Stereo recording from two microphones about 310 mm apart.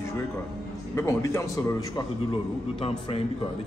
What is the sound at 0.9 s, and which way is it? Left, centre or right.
A man's voice, centre.